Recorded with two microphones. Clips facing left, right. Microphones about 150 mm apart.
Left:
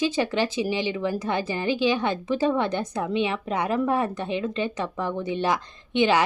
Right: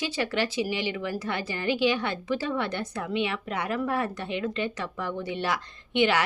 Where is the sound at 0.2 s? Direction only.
20° left (ahead or behind).